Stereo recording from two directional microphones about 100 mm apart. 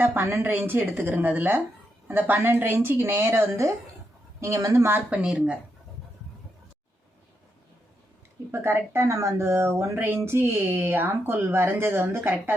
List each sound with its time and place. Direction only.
0.0 s speech: 20° right (ahead or behind)
4.9 s speech: 20° right (ahead or behind)
8.5 s speech: 25° right (ahead or behind)